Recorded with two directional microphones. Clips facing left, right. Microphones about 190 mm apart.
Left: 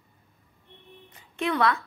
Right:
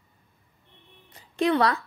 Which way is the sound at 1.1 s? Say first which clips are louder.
Right 5 dB; 35° right (ahead or behind).